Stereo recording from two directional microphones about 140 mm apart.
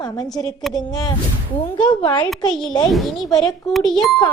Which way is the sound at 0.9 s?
30° left (ahead or behind).